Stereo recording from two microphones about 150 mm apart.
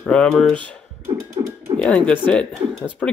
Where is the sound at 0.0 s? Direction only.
5° left (ahead or behind).